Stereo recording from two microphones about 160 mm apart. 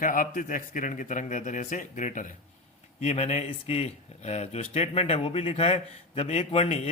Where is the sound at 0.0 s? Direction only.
60° left (ahead or behind).